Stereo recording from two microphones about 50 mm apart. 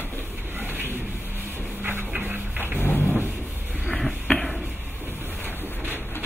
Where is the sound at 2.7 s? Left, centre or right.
Left.